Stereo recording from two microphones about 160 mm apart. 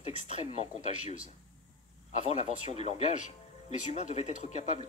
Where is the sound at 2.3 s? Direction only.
45° left (ahead or behind).